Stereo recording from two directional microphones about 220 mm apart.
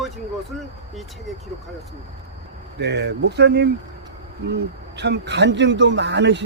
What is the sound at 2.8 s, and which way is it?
Speech, 50° right (ahead or behind).